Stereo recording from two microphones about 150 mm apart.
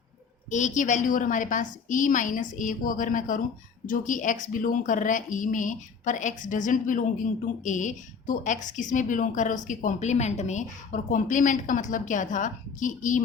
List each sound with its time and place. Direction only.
0.5 s a woman's voice: 55° left (ahead or behind)